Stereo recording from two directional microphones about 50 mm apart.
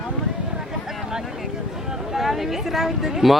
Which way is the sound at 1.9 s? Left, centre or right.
Centre.